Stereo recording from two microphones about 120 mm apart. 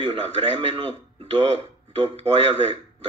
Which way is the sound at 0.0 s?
45° right (ahead or behind).